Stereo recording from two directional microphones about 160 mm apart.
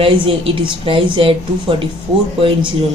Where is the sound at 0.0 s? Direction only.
35° right (ahead or behind).